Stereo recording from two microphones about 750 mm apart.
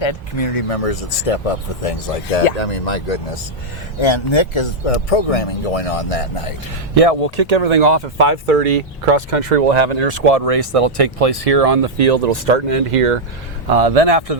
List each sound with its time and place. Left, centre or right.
0.0 s speech: left
4.0 s speech: left
6.9 s speech: right
13.7 s a man's voice: right